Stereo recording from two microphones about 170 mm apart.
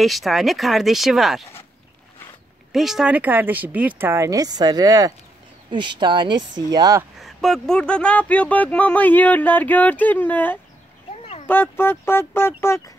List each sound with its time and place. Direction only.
0.0 s speech: centre (ahead or behind)
2.7 s speech: centre (ahead or behind); by 7.1 s 20° right (ahead or behind)
7.2 s speech: centre (ahead or behind)